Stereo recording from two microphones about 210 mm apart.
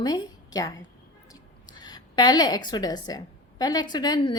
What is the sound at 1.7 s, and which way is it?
A woman's voice, 20° left (ahead or behind).